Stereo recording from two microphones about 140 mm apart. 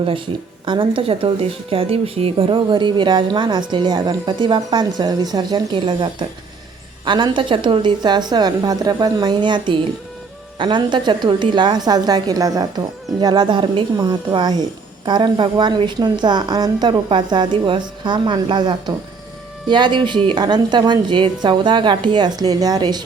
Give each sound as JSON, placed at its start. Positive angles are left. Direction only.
{"t": 0.6, "sound": "speech", "side_deg": -35}